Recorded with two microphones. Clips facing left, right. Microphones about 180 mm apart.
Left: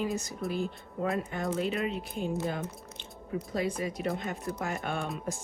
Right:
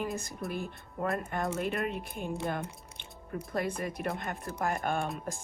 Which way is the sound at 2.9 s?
55° right (ahead or behind).